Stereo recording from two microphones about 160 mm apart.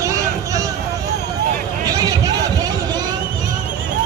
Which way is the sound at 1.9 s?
20° right (ahead or behind).